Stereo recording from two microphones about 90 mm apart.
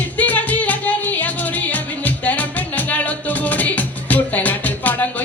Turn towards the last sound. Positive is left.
turn(degrees=20)  # may be behind; listen again after turning